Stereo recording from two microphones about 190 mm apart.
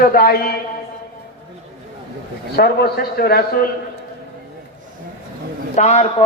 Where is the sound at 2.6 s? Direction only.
55° left (ahead or behind).